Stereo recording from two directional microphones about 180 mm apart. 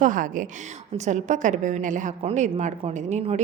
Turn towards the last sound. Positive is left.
turn(degrees=-40)  # may be behind; listen again after turning